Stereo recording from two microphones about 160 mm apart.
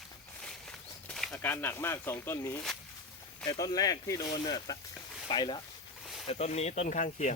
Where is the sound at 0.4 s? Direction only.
5° left (ahead or behind).